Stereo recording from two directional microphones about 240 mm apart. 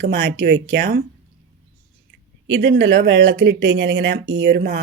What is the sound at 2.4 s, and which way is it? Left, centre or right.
Speech, right.